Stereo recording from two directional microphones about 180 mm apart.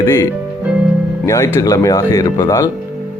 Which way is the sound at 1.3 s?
15° left (ahead or behind).